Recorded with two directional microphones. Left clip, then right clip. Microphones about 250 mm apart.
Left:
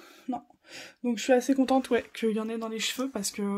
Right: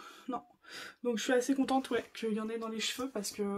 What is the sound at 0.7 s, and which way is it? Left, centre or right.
Speech, centre.